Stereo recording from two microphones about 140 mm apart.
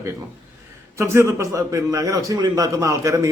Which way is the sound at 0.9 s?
20° right (ahead or behind).